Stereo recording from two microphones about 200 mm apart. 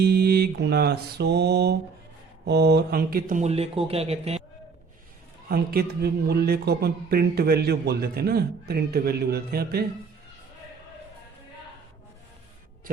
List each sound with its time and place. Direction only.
0.0 s mantra: 55° right (ahead or behind)
2.5 s speech: 55° right (ahead or behind); by 4.4 s 30° right (ahead or behind)
5.5 s speech: 50° right (ahead or behind)